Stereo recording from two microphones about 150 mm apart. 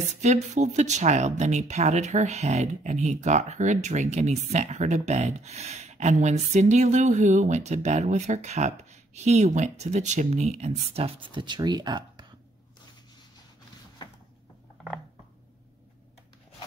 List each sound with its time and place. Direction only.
0.1 s speech: 50° right (ahead or behind); by 12.3 s 30° right (ahead or behind)